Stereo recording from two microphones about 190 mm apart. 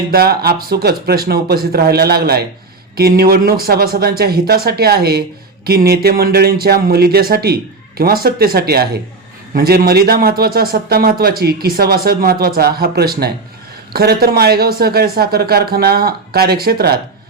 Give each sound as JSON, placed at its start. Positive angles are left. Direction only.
{"t": 0.1, "sound": "a man's voice", "side_deg": -55}